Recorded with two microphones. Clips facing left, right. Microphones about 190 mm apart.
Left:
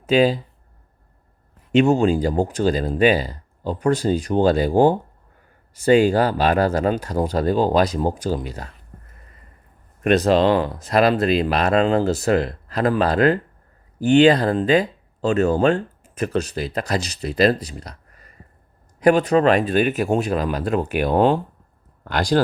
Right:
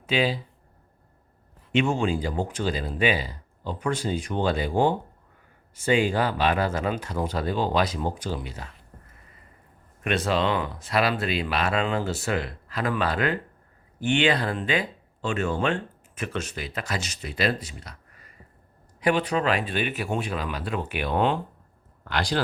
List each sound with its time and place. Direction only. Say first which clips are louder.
0.0 s speech: left 8 dB; 45° left (ahead or behind)
1.7 s speech: left 8 dB; 40° left (ahead or behind)
10.0 s speech: left 9 dB; 40° left (ahead or behind)